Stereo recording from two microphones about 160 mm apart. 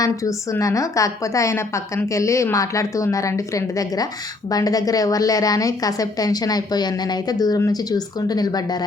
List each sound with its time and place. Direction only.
0.0 s a woman's voice: 20° left (ahead or behind)